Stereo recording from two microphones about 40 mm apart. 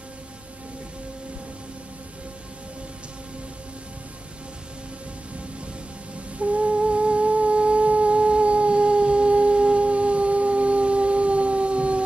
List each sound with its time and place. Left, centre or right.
6.3 s music: right